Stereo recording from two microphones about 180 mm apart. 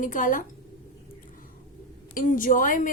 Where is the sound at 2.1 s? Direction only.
50° left (ahead or behind).